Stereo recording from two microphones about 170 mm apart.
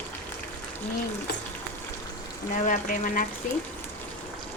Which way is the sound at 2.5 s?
50° left (ahead or behind).